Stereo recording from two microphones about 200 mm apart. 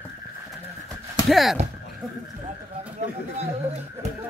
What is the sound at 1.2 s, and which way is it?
Speech, centre (ahead or behind).